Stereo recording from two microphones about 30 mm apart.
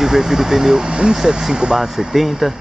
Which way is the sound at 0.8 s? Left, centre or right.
Right.